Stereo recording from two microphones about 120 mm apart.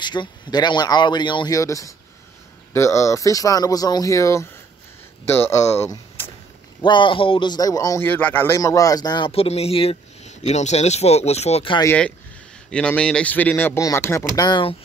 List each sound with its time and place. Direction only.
0.0 s speech: 40° left (ahead or behind)
1.6 s speech: 25° left (ahead or behind)
6.8 s speech: 45° left (ahead or behind)
8.0 s a man's voice: 15° left (ahead or behind)
8.5 s speech: 30° left (ahead or behind)
9.3 s speech: 55° left (ahead or behind)
12.6 s a man's voice: 10° left (ahead or behind); by 14.6 s 30° left (ahead or behind)